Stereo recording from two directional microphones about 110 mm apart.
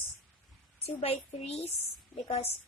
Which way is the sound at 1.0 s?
75° left (ahead or behind).